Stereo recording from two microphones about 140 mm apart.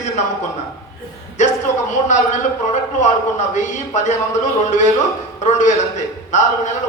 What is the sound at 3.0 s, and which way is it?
A woman's voice, 60° left (ahead or behind).